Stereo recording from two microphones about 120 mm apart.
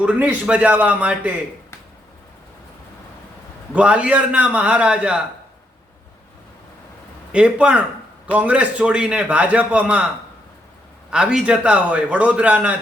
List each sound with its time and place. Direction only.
0.0 s a man's voice: 10° right (ahead or behind)
3.7 s a man's voice: 10° right (ahead or behind)
7.3 s a man's voice: 10° right (ahead or behind)
11.1 s a man's voice: 5° right (ahead or behind)